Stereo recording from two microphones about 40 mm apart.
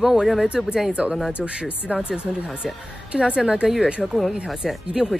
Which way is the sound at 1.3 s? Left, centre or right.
Right.